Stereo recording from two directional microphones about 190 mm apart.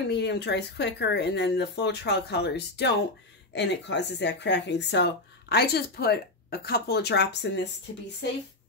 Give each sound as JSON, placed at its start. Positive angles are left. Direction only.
{"t": 0.1, "sound": "speech", "side_deg": 65}